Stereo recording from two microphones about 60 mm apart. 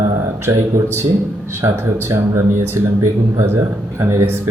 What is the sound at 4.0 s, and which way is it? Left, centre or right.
Speech, right.